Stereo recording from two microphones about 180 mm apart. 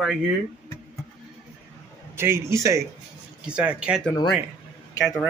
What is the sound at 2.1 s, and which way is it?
A man's voice, 15° right (ahead or behind).